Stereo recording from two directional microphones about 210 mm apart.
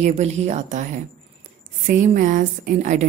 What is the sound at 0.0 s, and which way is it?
A woman's voice, 30° right (ahead or behind).